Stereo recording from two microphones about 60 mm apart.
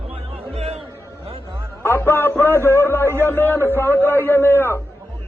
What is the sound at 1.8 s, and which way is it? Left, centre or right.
A man's voice, left.